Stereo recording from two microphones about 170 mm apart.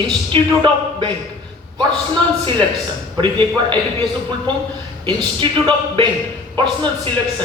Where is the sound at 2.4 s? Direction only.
30° right (ahead or behind).